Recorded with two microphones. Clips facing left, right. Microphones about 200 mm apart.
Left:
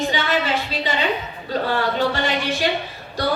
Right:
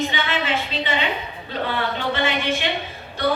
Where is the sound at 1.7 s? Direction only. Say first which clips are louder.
Left 4 dB; 40° left (ahead or behind).